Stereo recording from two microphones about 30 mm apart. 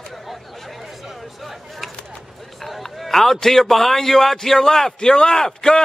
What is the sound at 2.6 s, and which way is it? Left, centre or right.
A man's voice, centre.